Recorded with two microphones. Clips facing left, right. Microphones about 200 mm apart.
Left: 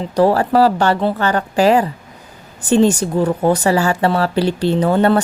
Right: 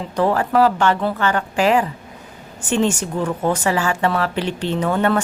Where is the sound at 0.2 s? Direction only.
35° left (ahead or behind).